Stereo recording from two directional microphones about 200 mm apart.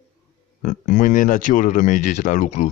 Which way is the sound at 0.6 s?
40° left (ahead or behind).